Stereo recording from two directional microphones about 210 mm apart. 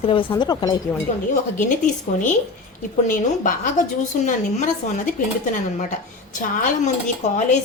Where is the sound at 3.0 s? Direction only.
40° left (ahead or behind).